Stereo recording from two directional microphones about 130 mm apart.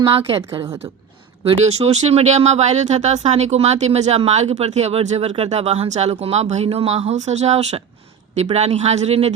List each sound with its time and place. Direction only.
0.1 s a woman's voice: 45° right (ahead or behind)
1.5 s speech: 55° right (ahead or behind)